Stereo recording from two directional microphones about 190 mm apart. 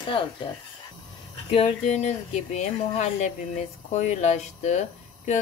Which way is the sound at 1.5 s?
35° left (ahead or behind).